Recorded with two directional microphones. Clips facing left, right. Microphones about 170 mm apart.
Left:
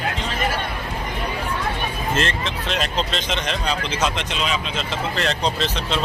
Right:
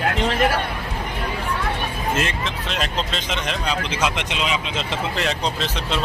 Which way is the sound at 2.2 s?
5° right (ahead or behind).